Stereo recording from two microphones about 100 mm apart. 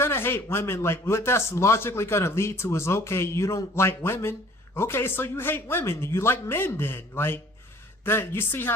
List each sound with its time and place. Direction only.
0.0 s speech: 25° left (ahead or behind)